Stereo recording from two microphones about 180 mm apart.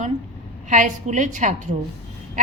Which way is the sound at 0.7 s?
45° right (ahead or behind).